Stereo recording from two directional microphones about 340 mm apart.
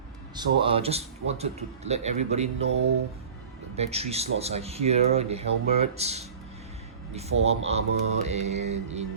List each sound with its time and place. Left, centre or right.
0.3 s speech: centre
3.8 s speech: centre